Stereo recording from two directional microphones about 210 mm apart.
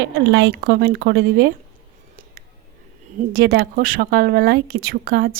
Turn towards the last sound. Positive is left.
turn(degrees=-50)  # may be behind; listen again after turning